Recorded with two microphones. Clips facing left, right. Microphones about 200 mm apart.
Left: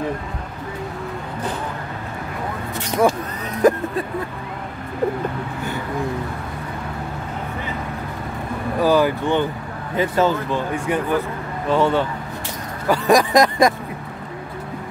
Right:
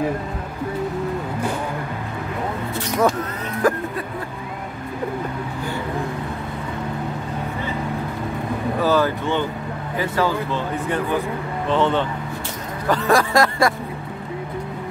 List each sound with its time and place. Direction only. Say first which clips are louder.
3.6 s vehicle: left 4 dB; 20° left (ahead or behind)
8.8 s speech: left 3 dB; 15° left (ahead or behind)